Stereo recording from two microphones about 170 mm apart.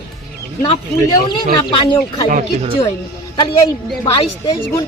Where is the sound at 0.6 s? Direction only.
30° left (ahead or behind).